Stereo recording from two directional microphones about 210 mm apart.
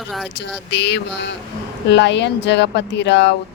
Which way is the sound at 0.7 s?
55° left (ahead or behind).